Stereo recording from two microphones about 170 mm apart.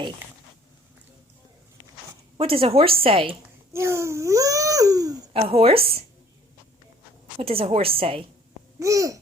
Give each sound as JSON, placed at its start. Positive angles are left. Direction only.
{"t": 2.4, "sound": "speech", "side_deg": -35}
{"t": 3.7, "sound": "speech", "side_deg": -15}
{"t": 5.3, "sound": "speech", "side_deg": -35}
{"t": 7.3, "sound": "speech", "side_deg": -35}
{"t": 8.8, "sound": "babbling", "side_deg": -20}